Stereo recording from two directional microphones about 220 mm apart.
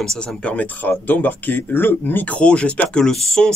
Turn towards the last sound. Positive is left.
turn(degrees=5)  # may be behind; listen again after turning